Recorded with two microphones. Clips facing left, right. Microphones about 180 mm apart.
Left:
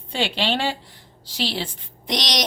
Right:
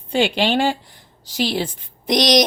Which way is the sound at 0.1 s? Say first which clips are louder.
Right 6 dB; 50° right (ahead or behind).